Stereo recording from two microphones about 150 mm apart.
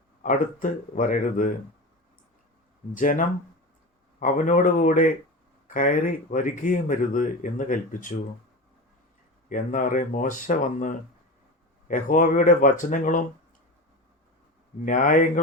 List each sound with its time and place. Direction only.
0.2 s speech: 60° left (ahead or behind)
2.9 s speech: 60° left (ahead or behind)
9.5 s speech: 60° left (ahead or behind)
14.8 s speech: 60° left (ahead or behind)